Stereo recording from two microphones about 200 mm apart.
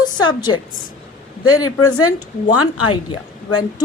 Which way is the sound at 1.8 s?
90° left.